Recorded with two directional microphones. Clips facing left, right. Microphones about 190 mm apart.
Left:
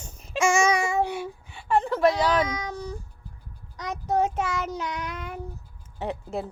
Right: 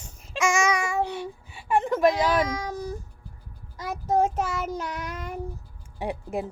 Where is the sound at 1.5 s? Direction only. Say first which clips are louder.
Even; 10° right (ahead or behind).